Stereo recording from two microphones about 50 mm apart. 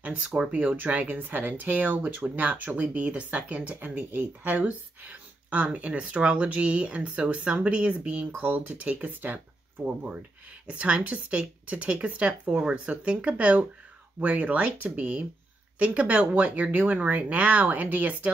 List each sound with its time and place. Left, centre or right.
0.0 s speech: right
9.8 s speech: right